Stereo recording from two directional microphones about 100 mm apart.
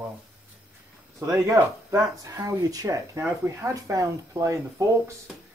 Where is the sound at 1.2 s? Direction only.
30° right (ahead or behind).